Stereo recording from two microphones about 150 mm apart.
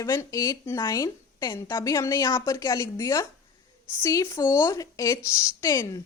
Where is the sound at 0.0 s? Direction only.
20° left (ahead or behind).